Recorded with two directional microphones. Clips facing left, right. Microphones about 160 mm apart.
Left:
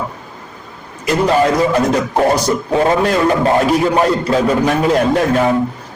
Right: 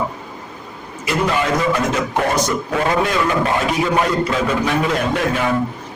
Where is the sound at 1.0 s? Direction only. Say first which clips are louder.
Left 6 dB; 35° left (ahead or behind).